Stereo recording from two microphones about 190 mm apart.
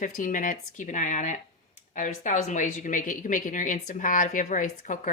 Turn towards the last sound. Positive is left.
turn(degrees=40)  # may be behind; listen again after turning